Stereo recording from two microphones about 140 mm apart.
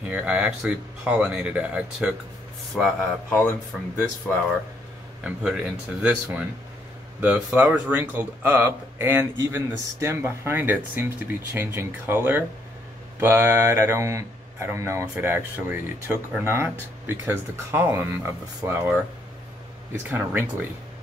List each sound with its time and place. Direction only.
0.1 s speech: 10° right (ahead or behind)
2.7 s speech: 5° left (ahead or behind)
5.2 s speech: 5° right (ahead or behind)
20.1 s speech: 15° right (ahead or behind)